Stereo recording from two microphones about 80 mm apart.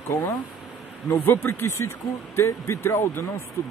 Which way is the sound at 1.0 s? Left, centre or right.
Left.